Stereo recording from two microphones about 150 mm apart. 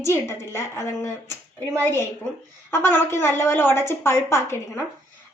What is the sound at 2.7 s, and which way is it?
A woman's voice, 15° left (ahead or behind).